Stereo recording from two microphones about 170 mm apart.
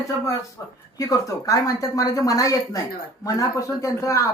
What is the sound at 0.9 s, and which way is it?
Speech, 20° left (ahead or behind).